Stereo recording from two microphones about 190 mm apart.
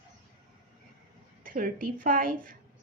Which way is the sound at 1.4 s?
45° right (ahead or behind).